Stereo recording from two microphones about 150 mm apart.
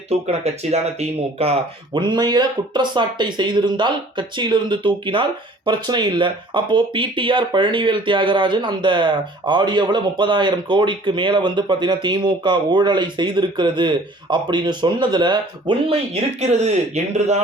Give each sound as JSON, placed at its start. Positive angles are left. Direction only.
{"t": 0.1, "sound": "speech", "side_deg": -45}
{"t": 16.4, "sound": "speech", "side_deg": -45}